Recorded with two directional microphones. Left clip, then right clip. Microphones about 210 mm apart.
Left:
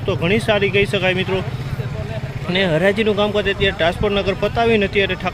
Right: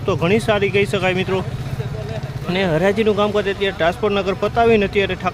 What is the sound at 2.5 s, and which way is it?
Speech, 5° right (ahead or behind).